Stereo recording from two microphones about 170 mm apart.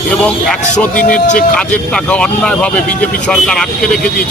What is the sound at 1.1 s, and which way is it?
Speech, 50° left (ahead or behind).